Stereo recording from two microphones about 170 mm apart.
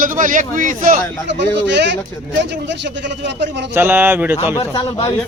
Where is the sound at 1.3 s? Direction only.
90° right.